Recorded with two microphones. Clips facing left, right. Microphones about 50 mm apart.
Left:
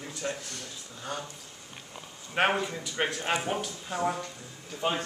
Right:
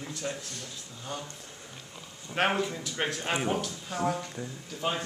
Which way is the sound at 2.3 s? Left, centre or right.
Centre.